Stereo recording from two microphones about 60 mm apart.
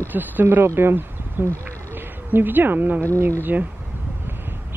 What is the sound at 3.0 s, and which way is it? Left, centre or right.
Speech, right.